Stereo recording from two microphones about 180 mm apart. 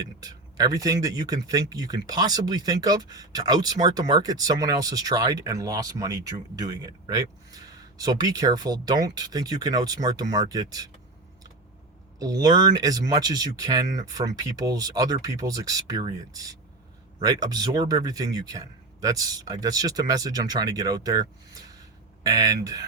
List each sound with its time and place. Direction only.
0.2 s speech: 20° right (ahead or behind)
12.2 s speech: 20° right (ahead or behind)